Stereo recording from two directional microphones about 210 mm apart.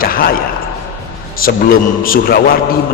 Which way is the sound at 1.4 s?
45° left (ahead or behind).